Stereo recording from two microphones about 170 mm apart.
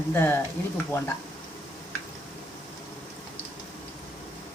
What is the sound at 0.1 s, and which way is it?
Speech, 15° left (ahead or behind).